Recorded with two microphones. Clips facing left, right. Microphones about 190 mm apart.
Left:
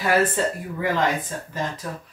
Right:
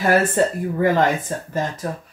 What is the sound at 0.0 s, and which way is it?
Speech, 45° right (ahead or behind).